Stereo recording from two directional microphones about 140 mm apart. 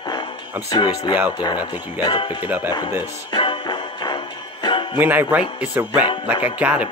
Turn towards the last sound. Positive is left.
turn(degrees=-10)  # may be behind; listen again after turning